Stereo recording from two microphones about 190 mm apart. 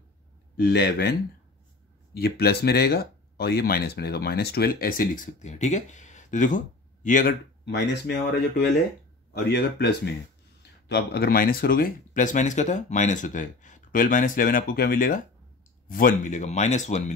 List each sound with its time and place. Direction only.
0.6 s speech: 60° left (ahead or behind)
2.1 s speech: 55° left (ahead or behind)
7.6 s speech: 60° left (ahead or behind); by 17.1 s 40° left (ahead or behind)